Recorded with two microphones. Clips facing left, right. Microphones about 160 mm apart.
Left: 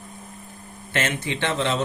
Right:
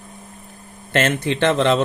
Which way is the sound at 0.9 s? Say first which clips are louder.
Right 7 dB; 60° right (ahead or behind).